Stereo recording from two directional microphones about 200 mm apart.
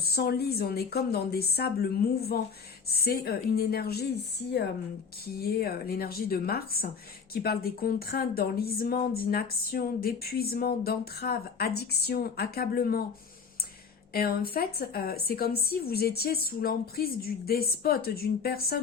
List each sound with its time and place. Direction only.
0.0 s speech: 50° left (ahead or behind)
5.2 s speech: 50° left (ahead or behind)
14.1 s speech: 50° left (ahead or behind)